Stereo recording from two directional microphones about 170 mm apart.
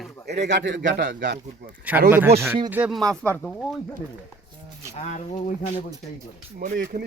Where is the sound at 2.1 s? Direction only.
15° right (ahead or behind).